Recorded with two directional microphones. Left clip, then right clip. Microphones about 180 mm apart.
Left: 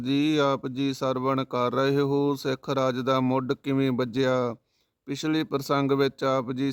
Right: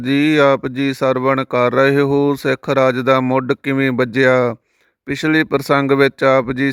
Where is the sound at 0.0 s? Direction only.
25° right (ahead or behind).